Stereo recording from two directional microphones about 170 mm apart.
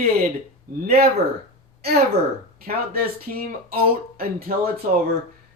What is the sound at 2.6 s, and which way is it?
Speech, 60° right (ahead or behind).